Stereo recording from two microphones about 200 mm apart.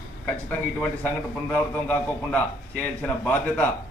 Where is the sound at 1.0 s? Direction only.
5° left (ahead or behind).